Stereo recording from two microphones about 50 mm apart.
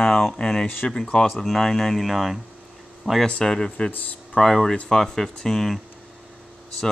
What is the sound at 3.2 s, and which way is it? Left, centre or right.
Speech, centre.